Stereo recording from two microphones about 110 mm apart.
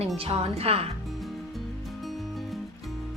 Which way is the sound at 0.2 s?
65° right (ahead or behind).